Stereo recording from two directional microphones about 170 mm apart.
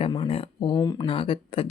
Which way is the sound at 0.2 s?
35° left (ahead or behind).